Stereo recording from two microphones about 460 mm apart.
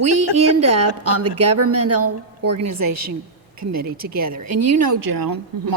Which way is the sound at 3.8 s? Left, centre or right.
Centre.